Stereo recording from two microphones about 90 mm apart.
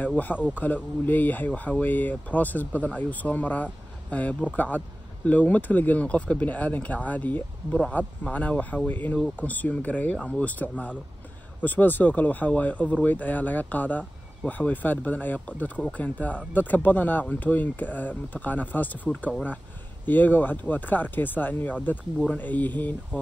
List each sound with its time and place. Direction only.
0.0 s speech: 15° left (ahead or behind)
20.1 s speech: 20° left (ahead or behind)